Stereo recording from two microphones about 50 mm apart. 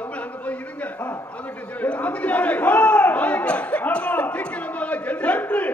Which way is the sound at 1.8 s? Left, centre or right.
Left.